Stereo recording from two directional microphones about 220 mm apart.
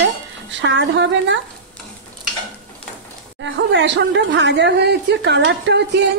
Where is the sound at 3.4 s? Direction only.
55° right (ahead or behind).